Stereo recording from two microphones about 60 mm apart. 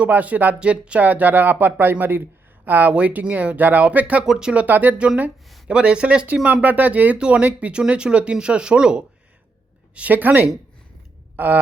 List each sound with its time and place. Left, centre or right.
0.0 s speech: right
4.3 s speech: centre
4.6 s speech: right
11.3 s a sound: right